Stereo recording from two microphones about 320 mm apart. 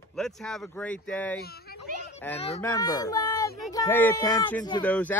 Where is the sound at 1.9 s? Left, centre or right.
Right.